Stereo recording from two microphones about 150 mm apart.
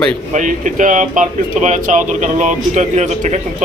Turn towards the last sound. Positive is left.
turn(degrees=-50)  # may be behind; listen again after turning